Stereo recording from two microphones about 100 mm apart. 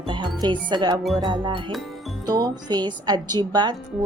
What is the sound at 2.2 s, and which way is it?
Speech, 40° right (ahead or behind).